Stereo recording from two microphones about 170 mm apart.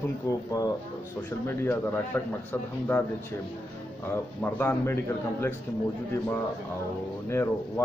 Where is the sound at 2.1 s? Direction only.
10° left (ahead or behind).